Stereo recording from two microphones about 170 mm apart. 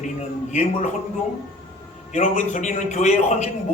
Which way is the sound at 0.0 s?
45° left (ahead or behind).